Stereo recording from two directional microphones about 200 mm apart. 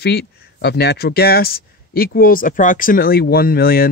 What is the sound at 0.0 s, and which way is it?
Speech, 55° left (ahead or behind).